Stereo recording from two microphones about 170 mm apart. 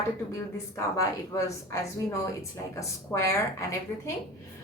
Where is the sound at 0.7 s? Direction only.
20° left (ahead or behind).